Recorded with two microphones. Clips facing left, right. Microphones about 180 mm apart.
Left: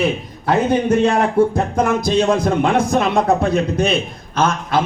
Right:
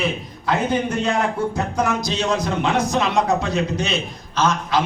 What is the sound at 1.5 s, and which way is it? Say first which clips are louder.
A man's voice: left 4 dB; 50° left (ahead or behind).